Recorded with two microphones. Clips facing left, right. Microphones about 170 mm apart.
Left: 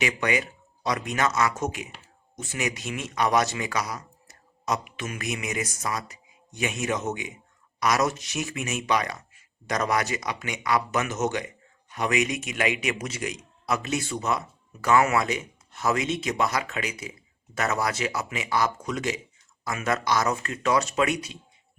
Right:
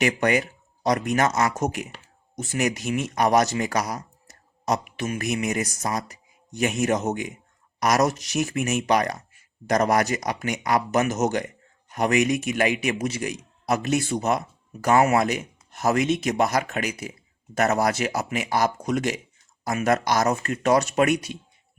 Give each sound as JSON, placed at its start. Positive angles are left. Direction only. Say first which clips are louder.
{"t": 0.0, "sound": "speech", "louder": "right 5 dB", "side_deg": -45}